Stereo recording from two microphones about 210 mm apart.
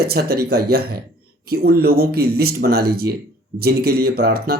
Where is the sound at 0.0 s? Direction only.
50° right (ahead or behind).